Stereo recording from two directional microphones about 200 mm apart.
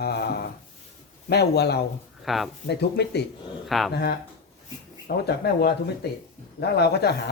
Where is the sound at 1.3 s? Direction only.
55° left (ahead or behind).